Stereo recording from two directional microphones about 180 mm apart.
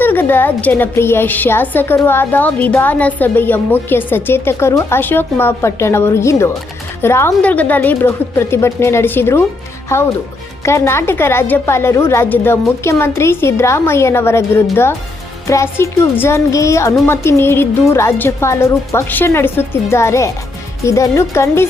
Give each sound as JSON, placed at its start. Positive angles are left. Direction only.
{"t": 0.0, "sound": "a woman's voice", "side_deg": 10}